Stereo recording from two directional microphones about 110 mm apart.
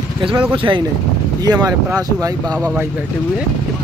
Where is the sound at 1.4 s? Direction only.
35° right (ahead or behind).